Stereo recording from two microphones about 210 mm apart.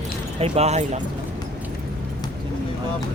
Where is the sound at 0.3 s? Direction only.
30° right (ahead or behind).